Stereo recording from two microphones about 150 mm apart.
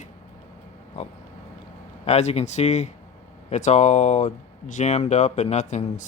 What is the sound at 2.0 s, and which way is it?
Speech, 45° left (ahead or behind).